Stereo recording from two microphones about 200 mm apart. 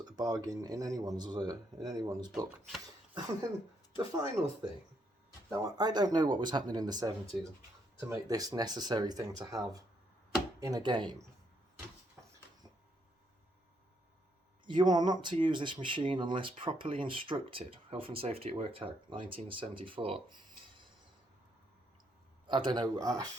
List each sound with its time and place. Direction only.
0.0 s speech: 20° right (ahead or behind)
3.9 s speech: 20° right (ahead or behind)
8.1 s speech: 20° right (ahead or behind)
10.6 s speech: 20° right (ahead or behind)
14.7 s speech: 20° right (ahead or behind)
22.4 s speech: 25° right (ahead or behind)